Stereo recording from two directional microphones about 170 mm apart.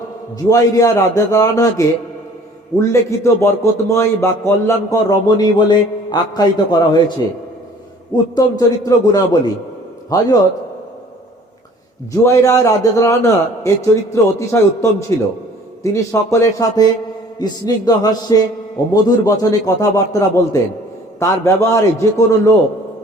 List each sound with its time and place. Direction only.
0.4 s a man's voice: 20° left (ahead or behind)
8.1 s a man's voice: 20° left (ahead or behind)
12.1 s a man's voice: 20° left (ahead or behind)